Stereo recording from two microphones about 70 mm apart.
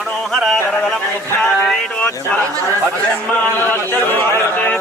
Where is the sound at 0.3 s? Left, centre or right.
Centre.